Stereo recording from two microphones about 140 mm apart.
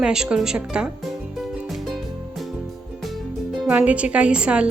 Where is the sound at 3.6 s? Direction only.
10° right (ahead or behind).